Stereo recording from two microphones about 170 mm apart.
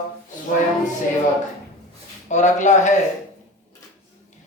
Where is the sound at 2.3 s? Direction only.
45° left (ahead or behind).